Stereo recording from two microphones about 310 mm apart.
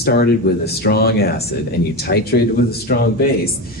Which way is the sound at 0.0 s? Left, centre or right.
Left.